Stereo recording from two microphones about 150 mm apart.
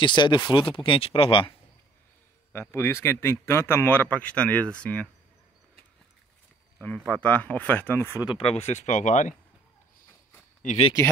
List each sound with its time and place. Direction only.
0.0 s speech: 30° left (ahead or behind)
2.5 s a man's voice: 15° left (ahead or behind)
6.8 s a man's voice: 10° left (ahead or behind)
8.2 s speech: 35° left (ahead or behind); by 9.3 s 55° left (ahead or behind)
10.6 s speech: 55° left (ahead or behind)